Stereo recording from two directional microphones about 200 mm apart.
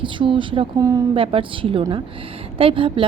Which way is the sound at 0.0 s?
25° right (ahead or behind).